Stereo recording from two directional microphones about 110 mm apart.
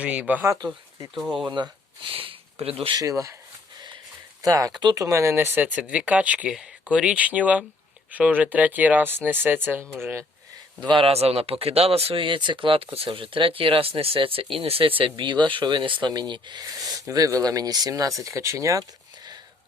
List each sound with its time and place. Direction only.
0.0 s speech: 10° right (ahead or behind)
0.4 s speech: 30° right (ahead or behind)
1.1 s speech: 5° right (ahead or behind)
1.5 s speech: 45° right (ahead or behind); by 2.9 s 60° right (ahead or behind)
2.9 s speech: 35° right (ahead or behind)
3.8 s sniff: 45° right (ahead or behind)
4.4 s speech: 35° right (ahead or behind)
10.8 s speech: 50° right (ahead or behind)